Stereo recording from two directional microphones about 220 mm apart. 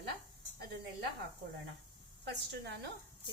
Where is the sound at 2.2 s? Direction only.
50° right (ahead or behind).